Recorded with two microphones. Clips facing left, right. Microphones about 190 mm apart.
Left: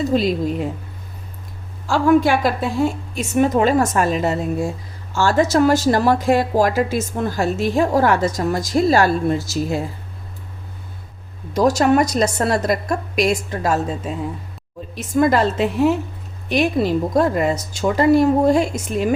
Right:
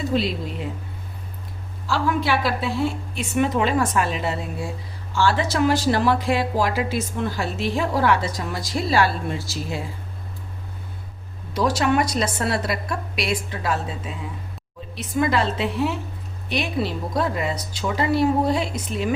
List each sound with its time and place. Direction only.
0.0 s a woman's voice: 45° left (ahead or behind)
1.9 s a woman's voice: 50° left (ahead or behind)
11.5 s a woman's voice: 45° left (ahead or behind)